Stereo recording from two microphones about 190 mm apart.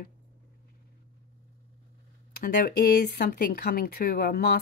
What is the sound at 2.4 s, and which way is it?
Speech, 50° left (ahead or behind).